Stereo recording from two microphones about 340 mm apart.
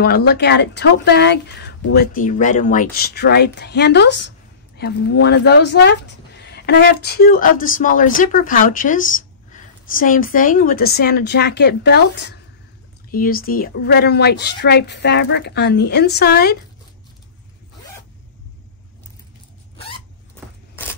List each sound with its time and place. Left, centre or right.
0.0 s speech: left